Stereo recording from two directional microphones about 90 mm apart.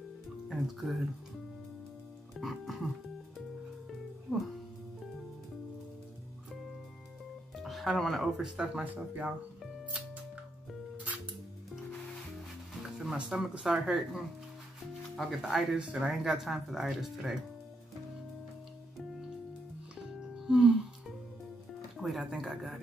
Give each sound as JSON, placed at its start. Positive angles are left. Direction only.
{"t": 0.5, "sound": "speech", "side_deg": 0}
{"t": 2.3, "sound": "speech", "side_deg": 0}
{"t": 7.5, "sound": "speech", "side_deg": 0}
{"t": 8.5, "sound": "speech", "side_deg": -10}
{"t": 9.8, "sound": "music", "side_deg": -15}
{"t": 13.0, "sound": "speech", "side_deg": -5}
{"t": 20.0, "sound": "music", "side_deg": -5}
{"t": 22.0, "sound": "speech", "side_deg": -5}